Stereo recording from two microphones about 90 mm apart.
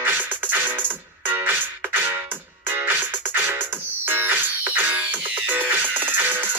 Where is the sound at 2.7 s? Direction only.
20° right (ahead or behind).